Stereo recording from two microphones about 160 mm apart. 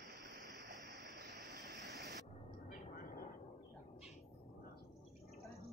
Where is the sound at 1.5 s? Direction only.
90° right.